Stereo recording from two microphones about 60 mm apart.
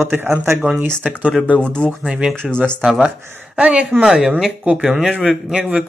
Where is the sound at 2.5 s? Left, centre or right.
Centre.